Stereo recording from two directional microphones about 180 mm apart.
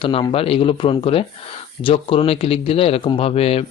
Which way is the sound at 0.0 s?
30° left (ahead or behind).